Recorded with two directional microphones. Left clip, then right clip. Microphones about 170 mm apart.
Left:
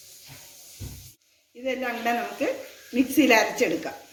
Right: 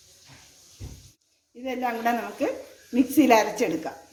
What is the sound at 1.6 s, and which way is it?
A woman's voice, 55° right (ahead or behind).